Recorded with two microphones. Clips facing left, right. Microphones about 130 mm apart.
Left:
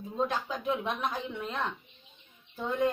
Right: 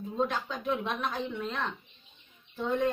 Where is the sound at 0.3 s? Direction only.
5° left (ahead or behind).